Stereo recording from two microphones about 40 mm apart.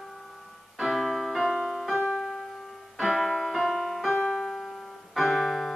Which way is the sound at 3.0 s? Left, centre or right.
Centre.